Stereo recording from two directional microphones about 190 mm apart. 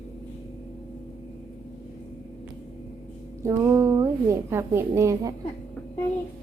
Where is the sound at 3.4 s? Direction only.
15° right (ahead or behind).